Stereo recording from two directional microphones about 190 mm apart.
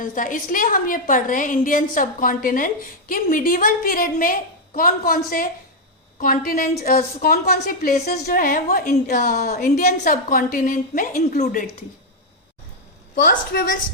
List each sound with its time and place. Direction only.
0.0 s a woman's voice: 45° left (ahead or behind)
13.2 s a woman's voice: 50° left (ahead or behind)